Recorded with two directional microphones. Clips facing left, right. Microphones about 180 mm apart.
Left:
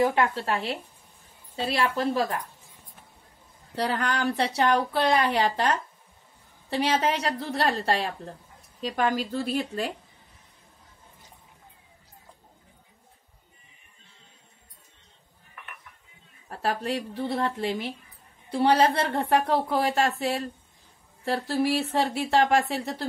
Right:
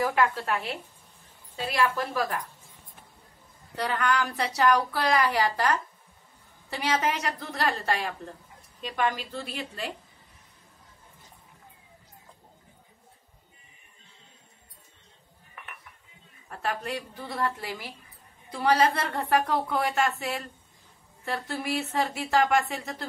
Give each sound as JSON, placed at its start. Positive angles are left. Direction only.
{"t": 0.0, "sound": "a woman's voice", "side_deg": 25}
{"t": 3.7, "sound": "a woman's voice", "side_deg": 35}
{"t": 16.4, "sound": "a woman's voice", "side_deg": 30}